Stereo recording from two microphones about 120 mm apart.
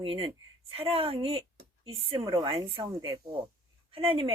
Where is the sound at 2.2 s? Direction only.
35° right (ahead or behind).